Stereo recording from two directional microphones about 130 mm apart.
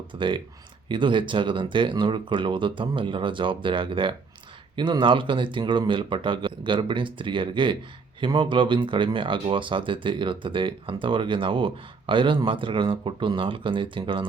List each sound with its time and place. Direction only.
0.1 s speech: 40° right (ahead or behind)